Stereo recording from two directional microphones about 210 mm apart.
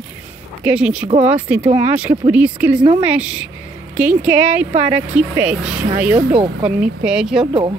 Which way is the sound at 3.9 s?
5° right (ahead or behind).